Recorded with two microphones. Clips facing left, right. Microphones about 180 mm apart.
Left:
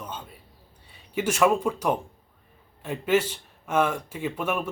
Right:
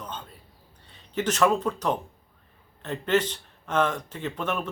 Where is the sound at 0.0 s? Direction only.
10° left (ahead or behind).